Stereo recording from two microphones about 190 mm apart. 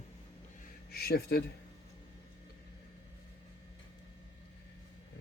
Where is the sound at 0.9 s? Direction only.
55° left (ahead or behind).